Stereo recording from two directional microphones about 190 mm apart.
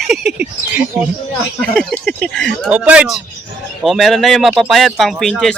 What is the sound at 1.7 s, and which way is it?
Speech, 5° left (ahead or behind).